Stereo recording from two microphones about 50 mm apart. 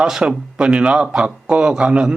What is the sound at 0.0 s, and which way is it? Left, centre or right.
Speech, centre.